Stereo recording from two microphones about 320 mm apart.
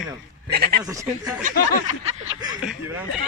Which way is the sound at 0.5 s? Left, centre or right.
Right.